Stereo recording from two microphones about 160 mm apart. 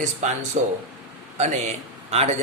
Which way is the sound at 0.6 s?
50° right (ahead or behind).